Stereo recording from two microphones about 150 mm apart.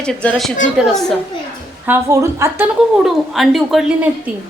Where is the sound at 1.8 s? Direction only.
15° right (ahead or behind).